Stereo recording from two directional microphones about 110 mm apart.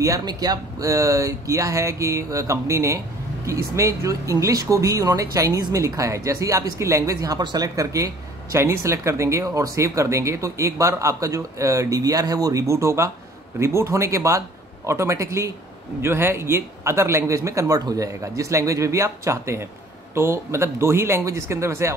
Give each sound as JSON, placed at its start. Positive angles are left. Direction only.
{"t": 0.0, "sound": "speech", "side_deg": -35}